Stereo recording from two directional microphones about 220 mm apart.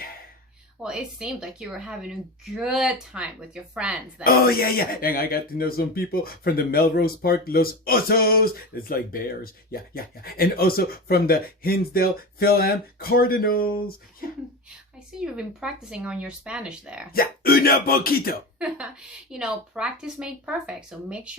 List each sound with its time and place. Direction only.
0.8 s speech: 5° right (ahead or behind)
4.2 s speech: 45° left (ahead or behind)
14.9 s speech: 5° right (ahead or behind)
17.1 s speech: 40° left (ahead or behind)
19.3 s speech: 5° right (ahead or behind)